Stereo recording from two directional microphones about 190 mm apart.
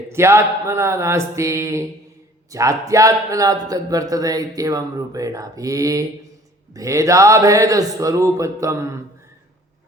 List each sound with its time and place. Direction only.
0.1 s speech: 15° right (ahead or behind)